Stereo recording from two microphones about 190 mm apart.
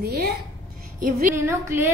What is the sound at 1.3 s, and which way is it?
Speech, 15° right (ahead or behind).